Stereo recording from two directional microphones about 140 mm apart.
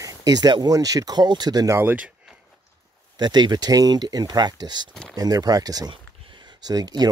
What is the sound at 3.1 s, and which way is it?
Speech, 30° right (ahead or behind).